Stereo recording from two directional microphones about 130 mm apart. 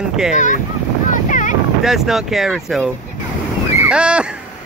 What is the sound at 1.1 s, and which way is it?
Boat, 85° left.